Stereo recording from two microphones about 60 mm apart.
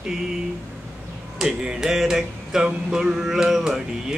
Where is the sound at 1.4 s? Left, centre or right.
Centre.